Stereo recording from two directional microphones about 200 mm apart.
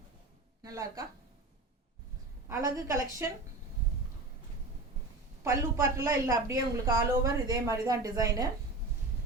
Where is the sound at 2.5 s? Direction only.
15° right (ahead or behind).